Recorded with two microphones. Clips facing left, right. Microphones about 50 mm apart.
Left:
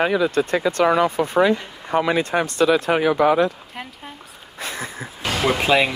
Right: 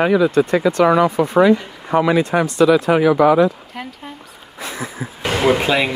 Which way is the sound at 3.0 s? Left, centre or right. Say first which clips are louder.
Right 4 dB; right.